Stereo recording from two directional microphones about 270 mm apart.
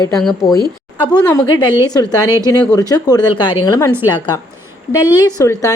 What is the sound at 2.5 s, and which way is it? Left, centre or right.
A woman's voice, centre.